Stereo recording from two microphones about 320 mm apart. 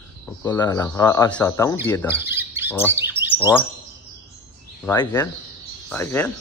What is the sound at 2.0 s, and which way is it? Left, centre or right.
Squawk, centre.